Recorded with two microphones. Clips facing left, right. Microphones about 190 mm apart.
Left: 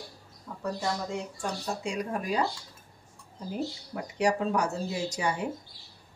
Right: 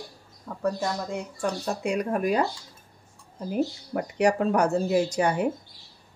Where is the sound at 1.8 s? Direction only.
60° right (ahead or behind).